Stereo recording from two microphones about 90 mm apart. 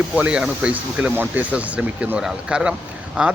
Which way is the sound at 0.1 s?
15° right (ahead or behind).